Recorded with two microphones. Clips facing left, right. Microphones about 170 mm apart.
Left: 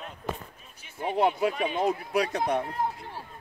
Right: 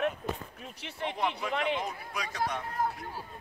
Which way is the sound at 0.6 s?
70° right (ahead or behind).